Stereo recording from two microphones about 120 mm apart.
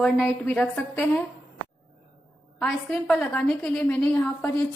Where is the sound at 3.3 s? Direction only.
10° left (ahead or behind).